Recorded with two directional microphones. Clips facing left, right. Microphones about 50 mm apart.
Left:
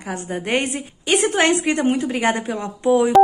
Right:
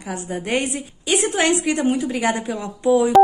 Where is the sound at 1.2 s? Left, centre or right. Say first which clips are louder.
Left 1 dB; left.